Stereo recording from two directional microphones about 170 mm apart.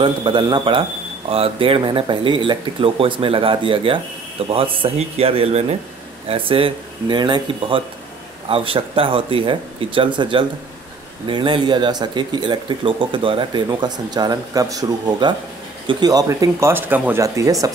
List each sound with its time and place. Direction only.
0.0 s speech: 30° right (ahead or behind)